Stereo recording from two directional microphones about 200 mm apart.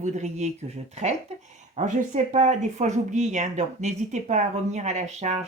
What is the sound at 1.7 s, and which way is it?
Speech, 35° right (ahead or behind).